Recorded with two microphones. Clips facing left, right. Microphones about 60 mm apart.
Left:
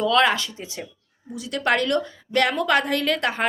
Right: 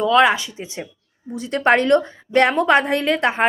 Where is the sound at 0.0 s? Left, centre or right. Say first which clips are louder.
Right 4 dB; right.